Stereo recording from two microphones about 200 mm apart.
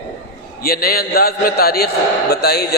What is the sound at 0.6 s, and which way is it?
A man's voice, 50° left (ahead or behind).